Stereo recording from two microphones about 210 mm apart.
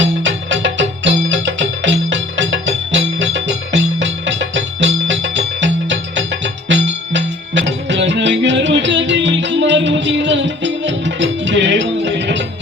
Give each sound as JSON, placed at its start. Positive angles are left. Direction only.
{"t": 0.0, "sound": "music", "side_deg": -65}